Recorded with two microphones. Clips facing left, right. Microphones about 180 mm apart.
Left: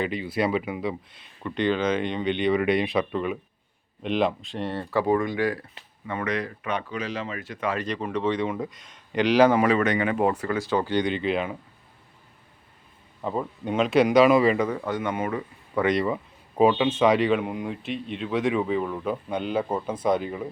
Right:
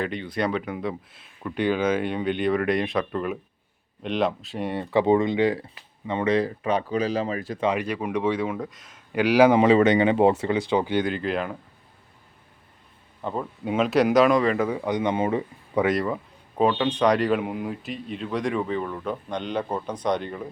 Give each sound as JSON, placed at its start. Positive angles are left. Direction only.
{"t": 0.0, "sound": "speech", "side_deg": 5}
{"t": 7.7, "sound": "speech", "side_deg": -10}
{"t": 9.6, "sound": "speech", "side_deg": -25}
{"t": 11.0, "sound": "speech", "side_deg": 0}
{"t": 13.2, "sound": "speech", "side_deg": 5}
{"t": 14.7, "sound": "speech", "side_deg": -15}
{"t": 15.7, "sound": "speech", "side_deg": -5}